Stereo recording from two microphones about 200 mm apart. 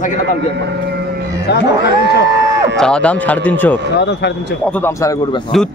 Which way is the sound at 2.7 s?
5° left (ahead or behind).